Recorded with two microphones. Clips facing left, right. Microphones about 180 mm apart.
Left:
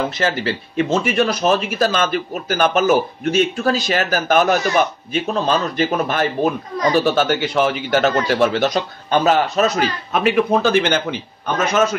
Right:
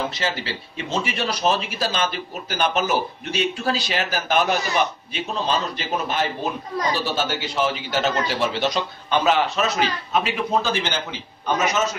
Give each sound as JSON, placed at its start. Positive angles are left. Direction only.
{"t": 0.1, "sound": "a man's voice", "side_deg": 55}